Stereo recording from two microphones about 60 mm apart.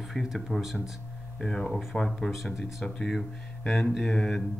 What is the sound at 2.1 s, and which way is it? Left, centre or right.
Speech, centre.